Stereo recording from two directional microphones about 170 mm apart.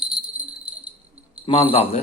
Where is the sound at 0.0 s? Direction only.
5° right (ahead or behind).